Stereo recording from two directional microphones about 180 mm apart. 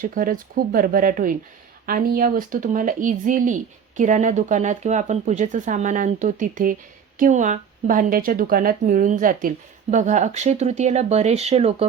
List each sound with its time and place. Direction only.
0.0 s speech: 50° right (ahead or behind); by 11.9 s 35° right (ahead or behind)